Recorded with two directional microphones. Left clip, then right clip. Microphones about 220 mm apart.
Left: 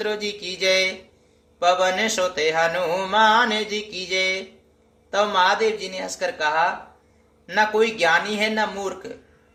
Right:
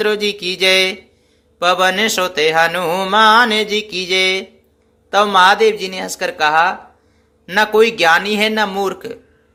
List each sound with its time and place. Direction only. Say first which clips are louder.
0.0 s mantra: right 9 dB; 45° right (ahead or behind)